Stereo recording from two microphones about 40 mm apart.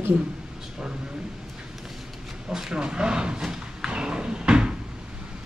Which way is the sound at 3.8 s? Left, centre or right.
Right.